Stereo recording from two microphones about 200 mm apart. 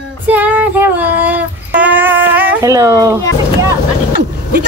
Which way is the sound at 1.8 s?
10° right (ahead or behind).